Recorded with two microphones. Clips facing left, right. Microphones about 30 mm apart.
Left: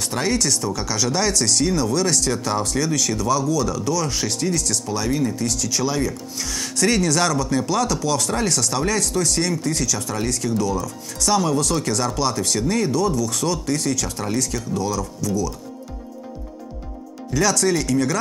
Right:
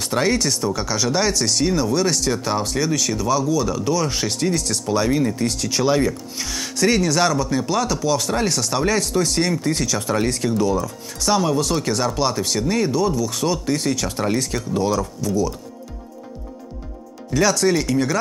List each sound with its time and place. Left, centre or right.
0.0 s speech: centre
6.5 s speech: centre
17.3 s speech: centre